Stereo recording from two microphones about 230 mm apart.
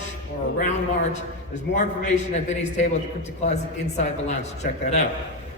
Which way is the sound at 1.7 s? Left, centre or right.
Left.